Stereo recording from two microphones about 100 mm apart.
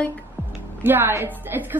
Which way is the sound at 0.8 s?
20° right (ahead or behind).